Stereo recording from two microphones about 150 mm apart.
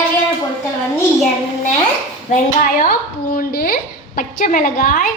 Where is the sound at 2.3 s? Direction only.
65° left (ahead or behind).